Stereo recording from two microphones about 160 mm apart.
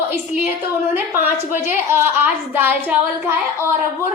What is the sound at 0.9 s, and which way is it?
A woman's voice, 10° right (ahead or behind).